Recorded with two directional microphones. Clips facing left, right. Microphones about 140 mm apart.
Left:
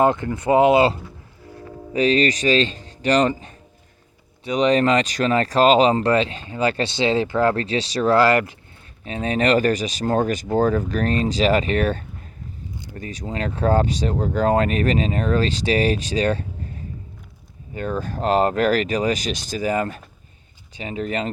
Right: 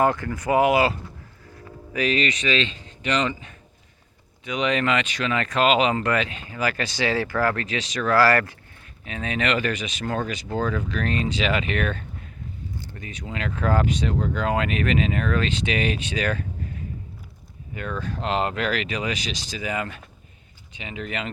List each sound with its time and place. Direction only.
0.0 s speech: 20° left (ahead or behind)
8.2 s speech: 20° left (ahead or behind)
9.0 s speech: 35° left (ahead or behind)